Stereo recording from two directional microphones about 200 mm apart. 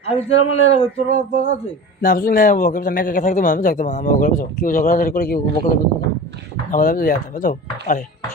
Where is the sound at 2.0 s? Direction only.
45° left (ahead or behind).